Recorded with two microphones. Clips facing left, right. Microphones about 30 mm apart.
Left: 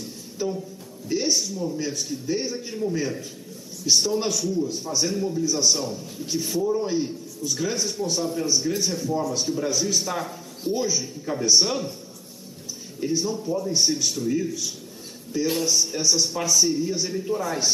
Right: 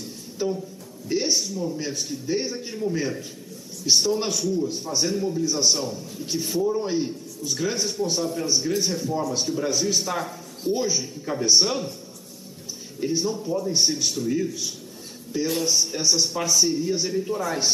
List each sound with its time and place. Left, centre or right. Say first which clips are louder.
0.4 s a man's voice: right 1 dB; centre
5.4 s a man's voice: left 1 dB; centre
13.0 s a man's voice: even; centre